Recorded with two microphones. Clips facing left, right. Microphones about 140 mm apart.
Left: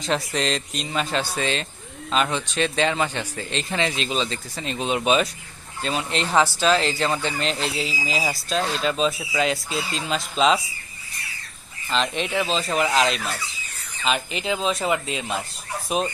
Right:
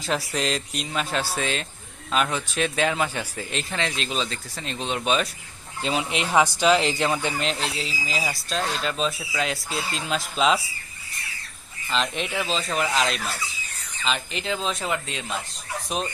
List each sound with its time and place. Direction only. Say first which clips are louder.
0.0 s speech: left 2 dB; 5° right (ahead or behind)
5.8 s speech: even; 15° right (ahead or behind)
7.4 s speech: left 2 dB; centre (ahead or behind)
11.9 s speech: left 2 dB; centre (ahead or behind)